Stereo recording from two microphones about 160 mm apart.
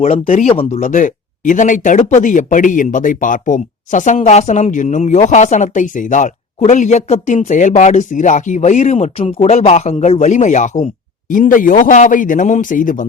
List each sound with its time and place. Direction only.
0.0 s a man's voice: 55° left (ahead or behind)
0.4 s speech: 35° left (ahead or behind)
0.8 s a man's voice: 55° left (ahead or behind)